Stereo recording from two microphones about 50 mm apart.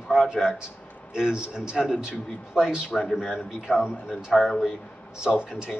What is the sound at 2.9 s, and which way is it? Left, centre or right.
Speech, centre.